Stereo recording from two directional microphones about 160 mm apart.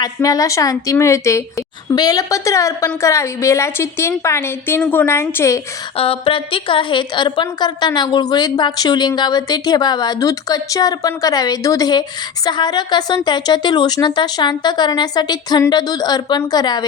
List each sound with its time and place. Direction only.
0.0 s a woman's voice: 20° left (ahead or behind)
6.0 s a woman's voice: 35° left (ahead or behind)